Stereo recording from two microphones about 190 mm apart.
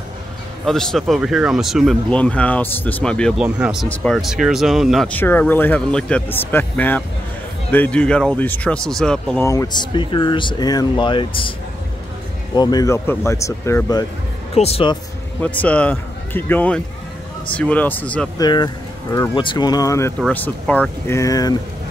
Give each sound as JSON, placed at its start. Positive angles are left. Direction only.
{"t": 0.7, "sound": "speech", "side_deg": 0}
{"t": 9.5, "sound": "speech", "side_deg": 20}
{"t": 12.5, "sound": "speech", "side_deg": 20}
{"t": 14.5, "sound": "speech", "side_deg": 30}
{"t": 15.4, "sound": "a man's voice", "side_deg": 5}
{"t": 18.4, "sound": "speech", "side_deg": 20}